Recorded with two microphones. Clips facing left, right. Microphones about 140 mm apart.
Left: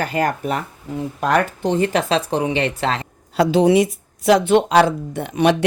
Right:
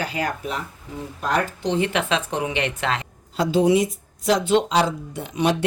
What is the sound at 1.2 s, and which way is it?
Speech, 75° left (ahead or behind).